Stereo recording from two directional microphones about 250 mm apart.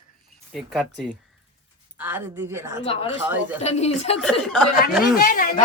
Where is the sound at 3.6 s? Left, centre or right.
Left.